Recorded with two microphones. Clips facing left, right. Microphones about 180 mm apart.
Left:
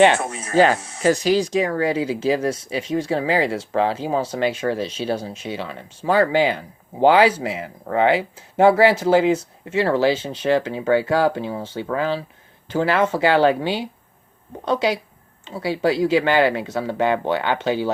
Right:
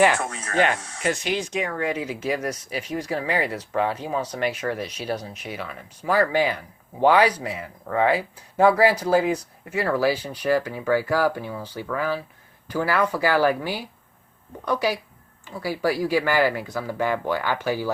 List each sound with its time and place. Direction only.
0.5 s speech: 35° left (ahead or behind)